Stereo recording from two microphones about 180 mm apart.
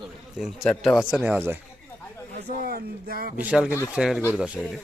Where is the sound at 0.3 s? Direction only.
Centre (ahead or behind).